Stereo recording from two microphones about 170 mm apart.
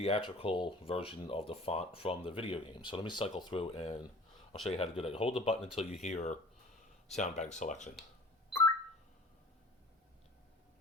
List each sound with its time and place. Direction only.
0.0 s speech: 35° left (ahead or behind)